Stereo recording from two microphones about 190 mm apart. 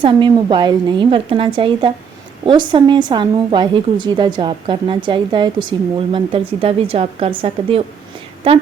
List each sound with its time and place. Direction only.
0.0 s a woman's voice: 25° right (ahead or behind)